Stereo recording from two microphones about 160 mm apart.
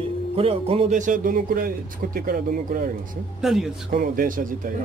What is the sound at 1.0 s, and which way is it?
A man's voice, 55° right (ahead or behind).